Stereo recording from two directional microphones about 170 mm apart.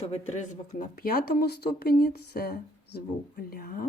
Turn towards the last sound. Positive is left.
turn(degrees=60)  # may be behind; listen again after turning